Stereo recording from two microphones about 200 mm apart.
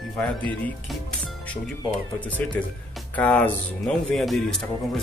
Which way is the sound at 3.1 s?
10° left (ahead or behind).